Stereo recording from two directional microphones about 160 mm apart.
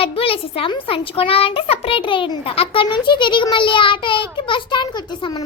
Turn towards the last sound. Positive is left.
turn(degrees=30)  # may be behind; listen again after turning